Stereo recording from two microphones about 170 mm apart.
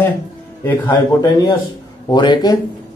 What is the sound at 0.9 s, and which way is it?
A man's voice, 20° left (ahead or behind).